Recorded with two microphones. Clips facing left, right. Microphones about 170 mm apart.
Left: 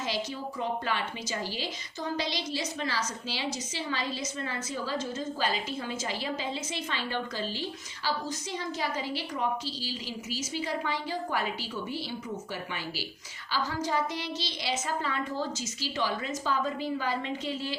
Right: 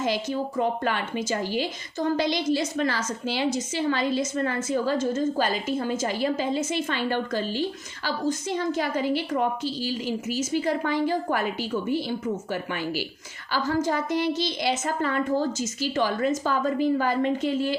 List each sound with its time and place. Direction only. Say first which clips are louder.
0.0 s a woman's voice: right 7 dB; 50° right (ahead or behind)
13.5 s a woman's voice: right 6 dB; 50° right (ahead or behind)